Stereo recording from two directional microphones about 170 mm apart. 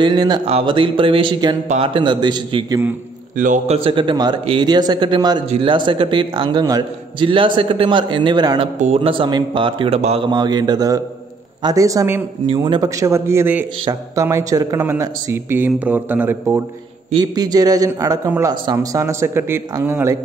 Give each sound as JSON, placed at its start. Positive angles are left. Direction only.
{"t": 0.0, "sound": "a man's voice", "side_deg": -25}
{"t": 3.3, "sound": "a man's voice", "side_deg": -50}
{"t": 8.7, "sound": "a man's voice", "side_deg": -40}
{"t": 17.1, "sound": "a man's voice", "side_deg": -25}